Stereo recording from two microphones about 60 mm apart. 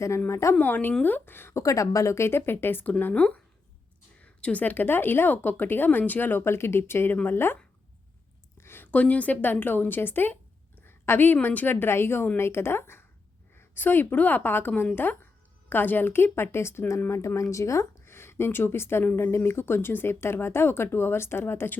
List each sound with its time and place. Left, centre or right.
0.3 s speech: left
0.6 s speech: left
1.5 s a woman's voice: left
4.2 s a sound: left
4.6 s speech: left
6.4 s speech: left
8.5 s a sound: left
8.9 s a woman's voice: left
10.8 s a sound: left
11.4 s speech: left
17.1 s speech: left
18.0 s speech: left